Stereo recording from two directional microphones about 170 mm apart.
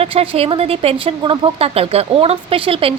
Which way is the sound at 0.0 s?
35° right (ahead or behind).